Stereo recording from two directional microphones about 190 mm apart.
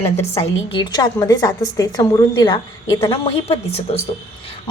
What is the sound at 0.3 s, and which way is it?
A woman's voice, 30° left (ahead or behind).